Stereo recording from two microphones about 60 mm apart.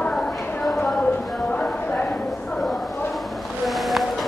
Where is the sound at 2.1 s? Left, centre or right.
Centre.